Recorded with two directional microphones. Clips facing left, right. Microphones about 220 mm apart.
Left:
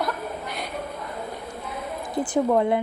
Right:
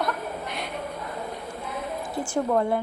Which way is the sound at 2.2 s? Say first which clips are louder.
Left 3 dB; 20° left (ahead or behind).